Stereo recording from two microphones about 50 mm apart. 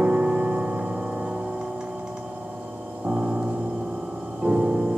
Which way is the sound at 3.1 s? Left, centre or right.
Centre.